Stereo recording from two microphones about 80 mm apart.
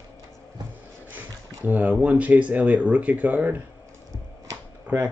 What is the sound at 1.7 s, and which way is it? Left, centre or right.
Speech, centre.